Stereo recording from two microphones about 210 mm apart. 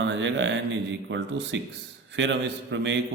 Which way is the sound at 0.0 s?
60° right (ahead or behind).